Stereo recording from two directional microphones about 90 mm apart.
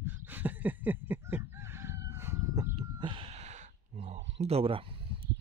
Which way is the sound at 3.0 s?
65° right (ahead or behind).